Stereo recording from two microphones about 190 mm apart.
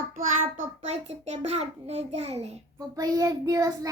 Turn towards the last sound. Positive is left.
turn(degrees=-20)  # may be behind; listen again after turning